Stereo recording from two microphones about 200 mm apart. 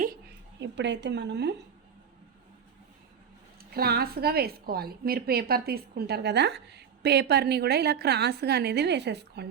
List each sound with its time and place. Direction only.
0.6 s a woman's voice: 60° right (ahead or behind)
3.6 s a woman's voice: 50° right (ahead or behind)